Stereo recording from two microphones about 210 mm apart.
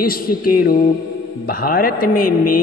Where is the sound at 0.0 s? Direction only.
45° left (ahead or behind).